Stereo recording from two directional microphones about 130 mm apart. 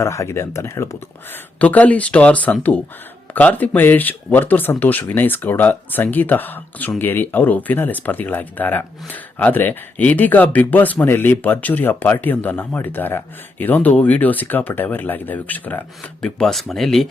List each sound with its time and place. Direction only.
0.0 s speech: 20° left (ahead or behind); by 17.1 s centre (ahead or behind)